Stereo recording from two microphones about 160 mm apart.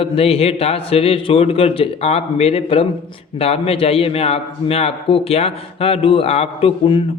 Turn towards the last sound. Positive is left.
turn(degrees=35)  # may be behind; listen again after turning